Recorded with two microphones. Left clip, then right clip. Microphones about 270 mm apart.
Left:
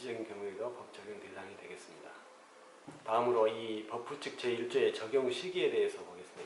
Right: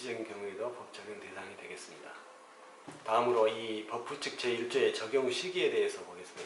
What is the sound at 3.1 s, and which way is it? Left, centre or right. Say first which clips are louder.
Speech: right 2 dB; centre.